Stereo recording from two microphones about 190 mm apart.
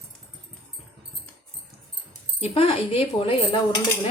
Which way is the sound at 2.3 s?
30° left (ahead or behind).